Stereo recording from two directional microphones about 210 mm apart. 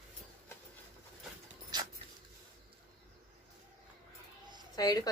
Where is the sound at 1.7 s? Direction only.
20° right (ahead or behind).